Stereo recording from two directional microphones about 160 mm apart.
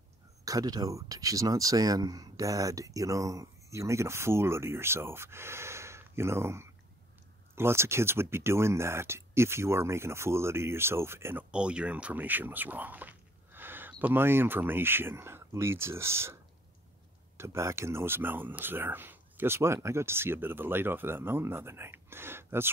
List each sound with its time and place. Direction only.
0.5 s speech: 25° right (ahead or behind)
17.4 s speech: 15° right (ahead or behind)